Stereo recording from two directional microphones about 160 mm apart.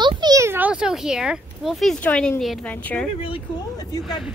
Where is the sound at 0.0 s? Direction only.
25° right (ahead or behind); by 3.1 s 10° left (ahead or behind).